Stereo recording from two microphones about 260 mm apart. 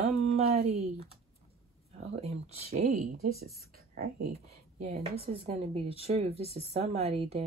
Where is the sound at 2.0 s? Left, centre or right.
Right.